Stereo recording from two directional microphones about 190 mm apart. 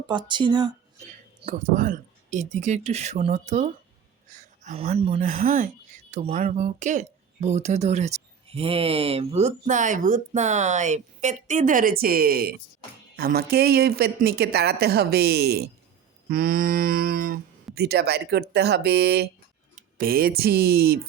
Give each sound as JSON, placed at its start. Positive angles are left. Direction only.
{"t": 0.1, "sound": "speech", "side_deg": -25}
{"t": 1.5, "sound": "speech", "side_deg": -45}
{"t": 16.3, "sound": "a sound", "side_deg": -50}
{"t": 17.7, "sound": "speech", "side_deg": -60}